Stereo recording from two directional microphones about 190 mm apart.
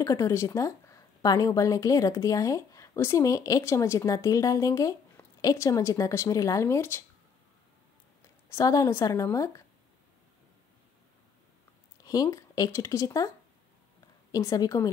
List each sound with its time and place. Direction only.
0.0 s a woman's voice: 15° left (ahead or behind)
8.5 s a woman's voice: 15° left (ahead or behind)
12.0 s speech: 20° left (ahead or behind)
14.3 s a woman's voice: 20° left (ahead or behind)